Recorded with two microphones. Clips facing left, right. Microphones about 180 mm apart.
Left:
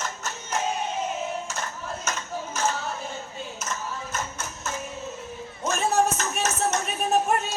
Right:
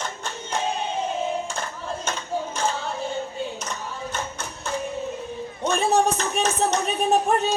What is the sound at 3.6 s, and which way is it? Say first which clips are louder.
Clapping: right 1 dB; 30° right (ahead or behind).